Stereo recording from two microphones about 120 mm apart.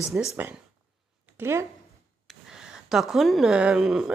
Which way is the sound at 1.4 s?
20° right (ahead or behind).